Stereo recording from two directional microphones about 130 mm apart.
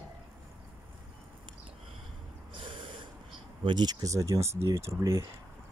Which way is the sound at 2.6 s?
40° right (ahead or behind).